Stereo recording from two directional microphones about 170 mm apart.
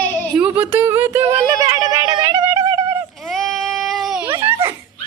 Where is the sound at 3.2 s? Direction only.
Centre (ahead or behind).